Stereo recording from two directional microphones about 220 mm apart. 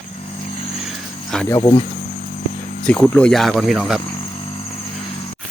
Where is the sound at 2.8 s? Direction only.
5° left (ahead or behind).